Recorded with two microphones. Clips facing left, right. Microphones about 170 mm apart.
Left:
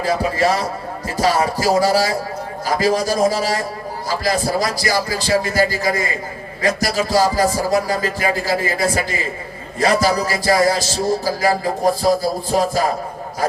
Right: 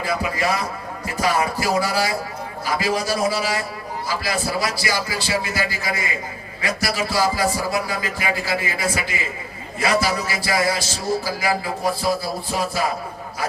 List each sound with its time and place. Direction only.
0.0 s speech: 35° left (ahead or behind)